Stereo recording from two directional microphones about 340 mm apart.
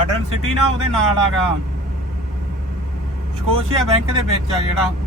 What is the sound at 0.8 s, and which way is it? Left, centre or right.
Speech, left.